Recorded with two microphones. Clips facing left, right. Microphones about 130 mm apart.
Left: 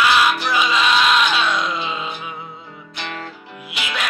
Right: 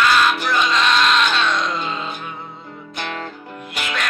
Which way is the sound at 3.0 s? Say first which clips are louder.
Right 2 dB; 45° right (ahead or behind).